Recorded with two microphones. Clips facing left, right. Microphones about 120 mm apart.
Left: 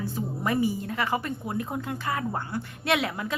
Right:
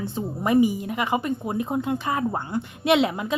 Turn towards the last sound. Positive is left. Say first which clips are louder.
# right 6 dB
turn(degrees=-20)  # may be behind; listen again after turning